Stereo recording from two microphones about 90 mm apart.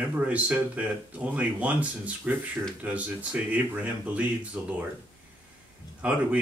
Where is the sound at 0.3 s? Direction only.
15° right (ahead or behind).